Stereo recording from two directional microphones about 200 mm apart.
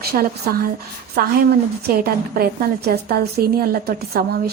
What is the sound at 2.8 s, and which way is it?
A woman's voice, 50° right (ahead or behind).